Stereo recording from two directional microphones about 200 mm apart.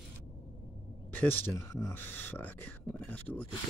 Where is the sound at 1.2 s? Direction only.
10° left (ahead or behind).